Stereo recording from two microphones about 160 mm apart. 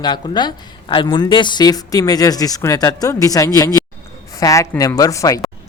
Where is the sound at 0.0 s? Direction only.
25° left (ahead or behind).